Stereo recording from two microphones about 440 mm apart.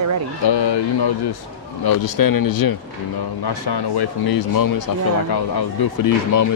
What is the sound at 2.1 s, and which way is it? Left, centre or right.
Speech, left.